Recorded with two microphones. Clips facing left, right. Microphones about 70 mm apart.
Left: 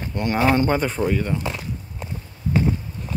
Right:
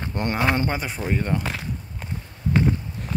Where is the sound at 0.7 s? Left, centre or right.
Centre.